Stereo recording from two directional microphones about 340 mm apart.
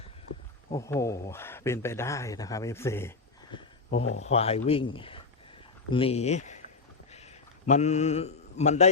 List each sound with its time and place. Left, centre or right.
0.7 s speech: centre
4.1 s speech: centre
5.9 s mantra: centre
7.7 s mantra: centre